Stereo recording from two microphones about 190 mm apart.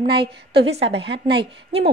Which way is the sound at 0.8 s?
65° right (ahead or behind).